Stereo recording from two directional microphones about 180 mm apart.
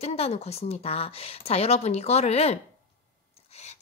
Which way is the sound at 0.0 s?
35° left (ahead or behind).